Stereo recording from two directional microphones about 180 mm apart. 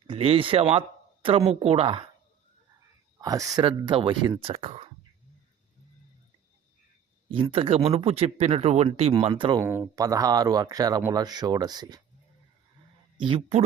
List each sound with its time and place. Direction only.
0.1 s speech: 30° right (ahead or behind)
3.2 s speech: 20° right (ahead or behind); by 4.9 s 35° right (ahead or behind)
7.3 s speech: 30° right (ahead or behind)
9.6 s speech: 10° right (ahead or behind)
13.1 s speech: 30° right (ahead or behind)